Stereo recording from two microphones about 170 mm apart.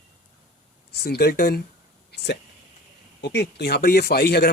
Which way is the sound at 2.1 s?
85° left.